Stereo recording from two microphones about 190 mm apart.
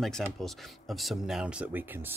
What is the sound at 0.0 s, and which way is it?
Speech, centre (ahead or behind).